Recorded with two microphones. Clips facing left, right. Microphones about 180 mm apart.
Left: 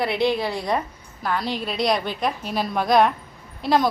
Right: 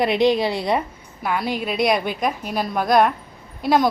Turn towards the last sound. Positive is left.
turn(degrees=-5)  # may be behind; listen again after turning